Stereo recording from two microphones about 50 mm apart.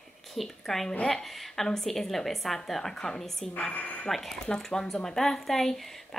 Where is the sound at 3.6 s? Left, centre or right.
Left.